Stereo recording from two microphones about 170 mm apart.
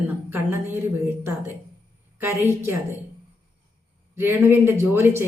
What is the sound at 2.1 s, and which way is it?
Speech, 15° right (ahead or behind).